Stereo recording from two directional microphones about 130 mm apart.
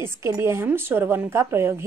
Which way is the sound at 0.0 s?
20° right (ahead or behind).